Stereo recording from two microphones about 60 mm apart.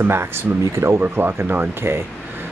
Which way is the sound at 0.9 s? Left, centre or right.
Right.